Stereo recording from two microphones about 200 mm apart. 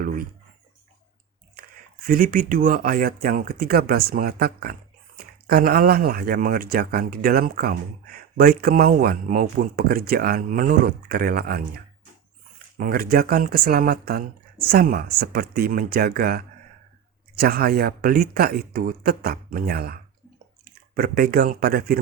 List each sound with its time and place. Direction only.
2.0 s speech: 45° right (ahead or behind)